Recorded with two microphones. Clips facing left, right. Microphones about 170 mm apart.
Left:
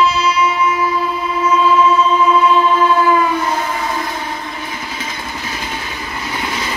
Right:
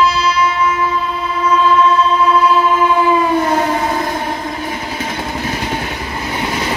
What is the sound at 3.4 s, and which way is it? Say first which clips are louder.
Train: right 4 dB; 50° right (ahead or behind).